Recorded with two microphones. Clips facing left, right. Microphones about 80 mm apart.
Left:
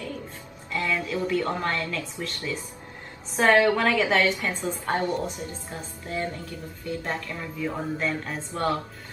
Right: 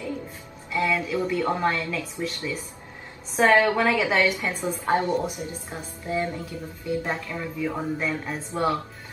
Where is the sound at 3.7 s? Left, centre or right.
Centre.